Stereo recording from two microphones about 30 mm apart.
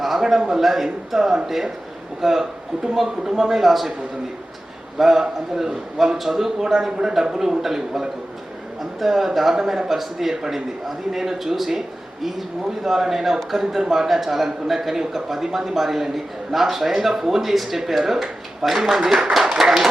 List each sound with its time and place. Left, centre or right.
0.0 s a man's voice: centre
4.9 s speech: centre
12.8 s speech: centre
19.4 s clapping: centre